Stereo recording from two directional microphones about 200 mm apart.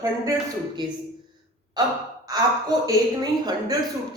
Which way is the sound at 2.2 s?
20° right (ahead or behind).